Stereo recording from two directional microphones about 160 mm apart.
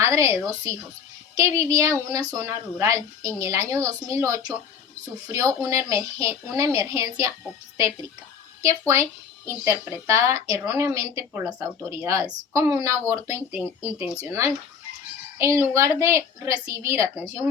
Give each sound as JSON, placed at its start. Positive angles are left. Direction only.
{"t": 0.0, "sound": "speech", "side_deg": -20}
{"t": 9.5, "sound": "speech", "side_deg": -15}